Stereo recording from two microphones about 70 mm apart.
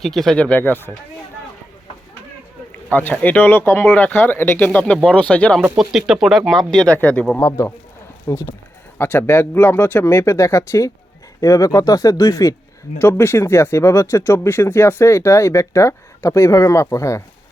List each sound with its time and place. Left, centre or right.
0.0 s speech: centre
0.3 s speech: centre
0.6 s speech: left
2.9 s speech: left
4.7 s speech: left
5.7 s speech: centre
6.5 s speech: centre
7.3 s speech: left
8.3 s speech: left
9.0 s speech: left
13.0 s speech: left